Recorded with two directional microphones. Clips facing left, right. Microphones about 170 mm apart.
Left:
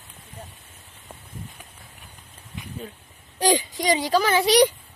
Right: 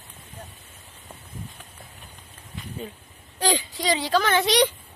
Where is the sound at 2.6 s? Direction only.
15° left (ahead or behind).